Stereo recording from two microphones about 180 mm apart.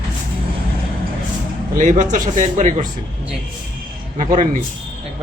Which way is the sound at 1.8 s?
45° right (ahead or behind).